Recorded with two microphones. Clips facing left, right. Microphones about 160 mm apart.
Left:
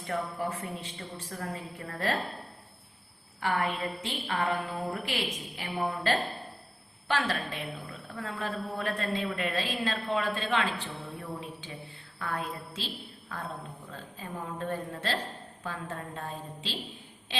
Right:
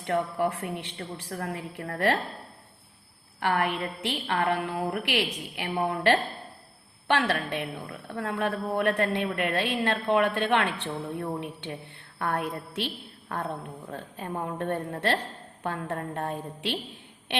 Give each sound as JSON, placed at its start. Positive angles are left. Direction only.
{"t": 0.0, "sound": "a woman's voice", "side_deg": -65}
{"t": 3.4, "sound": "a woman's voice", "side_deg": -65}